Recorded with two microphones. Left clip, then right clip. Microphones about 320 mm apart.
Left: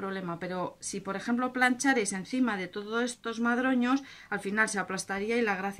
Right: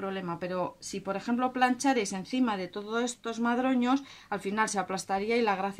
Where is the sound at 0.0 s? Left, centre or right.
Centre.